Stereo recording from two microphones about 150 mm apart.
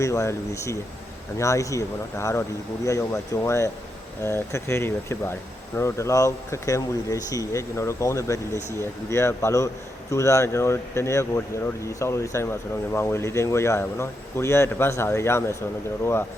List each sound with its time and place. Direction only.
0.0 s speech: 20° left (ahead or behind)